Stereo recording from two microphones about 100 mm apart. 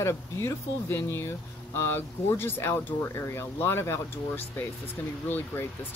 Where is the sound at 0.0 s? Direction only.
25° left (ahead or behind).